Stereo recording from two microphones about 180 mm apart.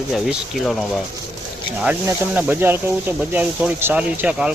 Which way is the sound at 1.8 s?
10° right (ahead or behind).